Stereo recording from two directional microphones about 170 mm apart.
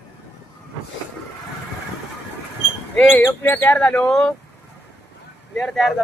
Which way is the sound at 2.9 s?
10° left (ahead or behind).